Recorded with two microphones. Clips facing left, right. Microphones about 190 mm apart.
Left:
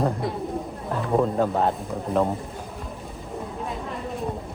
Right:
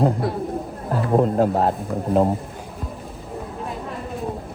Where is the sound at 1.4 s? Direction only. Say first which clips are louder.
Right 3 dB; 40° right (ahead or behind).